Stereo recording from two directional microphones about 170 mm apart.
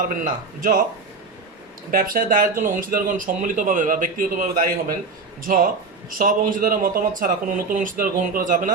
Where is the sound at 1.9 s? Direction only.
55° right (ahead or behind).